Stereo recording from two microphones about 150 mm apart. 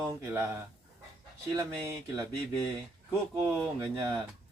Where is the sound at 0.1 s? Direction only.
15° right (ahead or behind).